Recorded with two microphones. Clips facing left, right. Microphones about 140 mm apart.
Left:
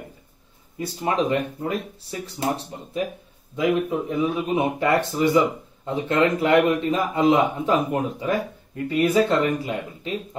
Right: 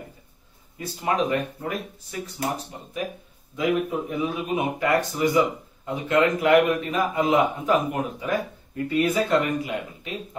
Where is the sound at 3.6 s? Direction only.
30° left (ahead or behind).